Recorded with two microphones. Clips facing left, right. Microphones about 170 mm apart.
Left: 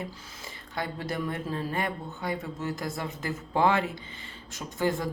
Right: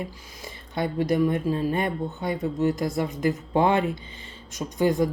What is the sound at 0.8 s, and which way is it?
Speech, 20° right (ahead or behind).